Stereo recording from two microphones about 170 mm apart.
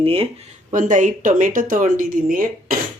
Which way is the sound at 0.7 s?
50° right (ahead or behind).